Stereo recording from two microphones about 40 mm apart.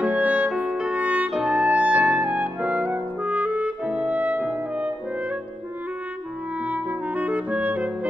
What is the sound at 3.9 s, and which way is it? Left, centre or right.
French horn, right.